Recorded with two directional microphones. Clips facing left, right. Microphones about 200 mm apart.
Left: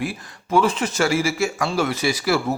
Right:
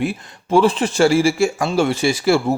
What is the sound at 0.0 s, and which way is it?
Speech, 25° right (ahead or behind).